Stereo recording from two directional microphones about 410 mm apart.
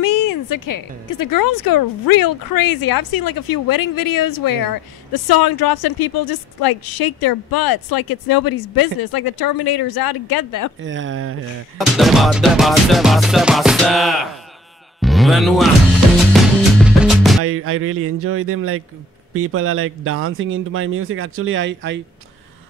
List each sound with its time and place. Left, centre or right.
0.0 s speech: left
10.8 s speech: right
11.8 s music: centre
17.5 s speech: right